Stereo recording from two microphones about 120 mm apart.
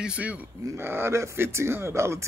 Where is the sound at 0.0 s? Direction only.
10° right (ahead or behind).